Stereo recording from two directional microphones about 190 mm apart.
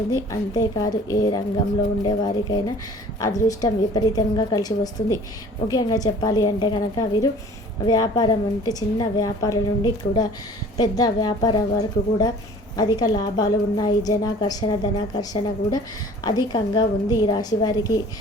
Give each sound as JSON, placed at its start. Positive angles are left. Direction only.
{"t": 0.1, "sound": "a woman's voice", "side_deg": 20}